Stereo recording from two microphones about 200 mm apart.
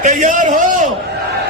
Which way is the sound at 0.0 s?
40° right (ahead or behind).